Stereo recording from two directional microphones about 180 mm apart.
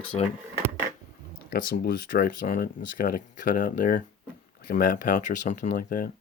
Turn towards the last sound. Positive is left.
turn(degrees=50)  # may be behind; listen again after turning